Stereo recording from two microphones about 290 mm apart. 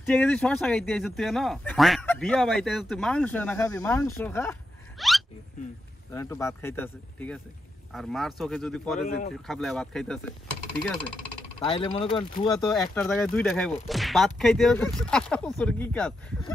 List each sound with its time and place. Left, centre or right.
0.0 s speech: centre
11.6 s speech: centre
12.7 s speech: centre